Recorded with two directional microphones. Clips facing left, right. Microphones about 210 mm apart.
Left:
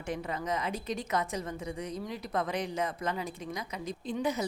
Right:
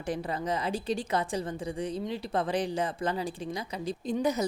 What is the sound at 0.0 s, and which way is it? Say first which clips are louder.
A woman's voice: right 3 dB; 35° right (ahead or behind).